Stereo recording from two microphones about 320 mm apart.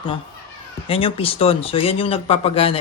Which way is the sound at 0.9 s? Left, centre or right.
Centre.